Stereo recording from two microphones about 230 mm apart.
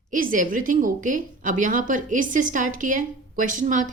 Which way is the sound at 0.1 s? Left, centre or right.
Right.